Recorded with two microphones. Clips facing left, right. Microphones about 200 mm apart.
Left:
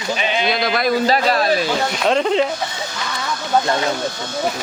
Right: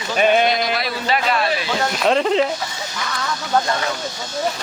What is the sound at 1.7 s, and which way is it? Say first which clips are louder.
Speech: even; centre (ahead or behind).